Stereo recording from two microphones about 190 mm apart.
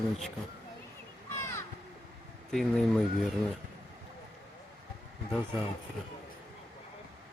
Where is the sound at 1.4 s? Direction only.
15° left (ahead or behind).